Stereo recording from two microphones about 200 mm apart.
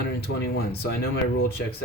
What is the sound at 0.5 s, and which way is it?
Speech, 50° left (ahead or behind).